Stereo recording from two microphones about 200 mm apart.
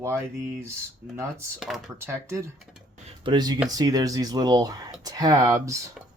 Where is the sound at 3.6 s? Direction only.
20° right (ahead or behind).